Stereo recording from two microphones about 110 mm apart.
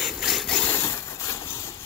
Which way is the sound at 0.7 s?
25° left (ahead or behind).